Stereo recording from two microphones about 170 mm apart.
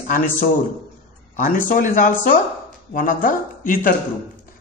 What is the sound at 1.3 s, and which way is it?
Speech, 55° left (ahead or behind).